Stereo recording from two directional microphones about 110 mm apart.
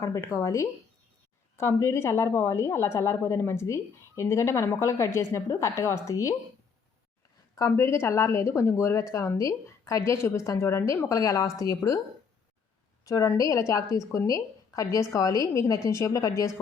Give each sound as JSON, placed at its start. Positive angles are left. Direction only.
{"t": 0.0, "sound": "a woman's voice", "side_deg": 30}
{"t": 7.7, "sound": "a woman's voice", "side_deg": 25}
{"t": 13.1, "sound": "a woman's voice", "side_deg": 30}